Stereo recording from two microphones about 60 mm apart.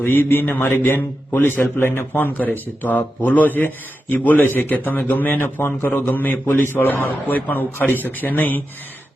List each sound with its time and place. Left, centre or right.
0.0 s a man's voice: left